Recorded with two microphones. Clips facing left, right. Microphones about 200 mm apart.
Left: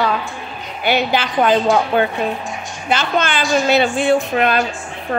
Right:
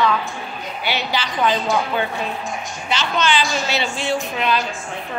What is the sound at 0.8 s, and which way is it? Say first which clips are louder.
A woman's voice: left 7 dB; 55° left (ahead or behind).